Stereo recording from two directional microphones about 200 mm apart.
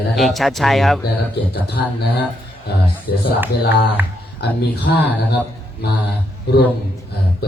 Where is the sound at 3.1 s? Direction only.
50° left (ahead or behind).